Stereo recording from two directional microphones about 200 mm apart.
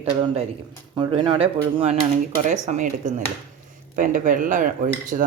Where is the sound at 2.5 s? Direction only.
40° right (ahead or behind).